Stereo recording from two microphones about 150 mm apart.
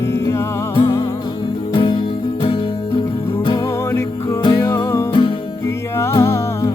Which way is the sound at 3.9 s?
20° left (ahead or behind).